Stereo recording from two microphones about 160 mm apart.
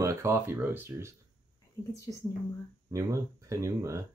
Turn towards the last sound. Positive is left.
turn(degrees=-20)  # may be behind; listen again after turning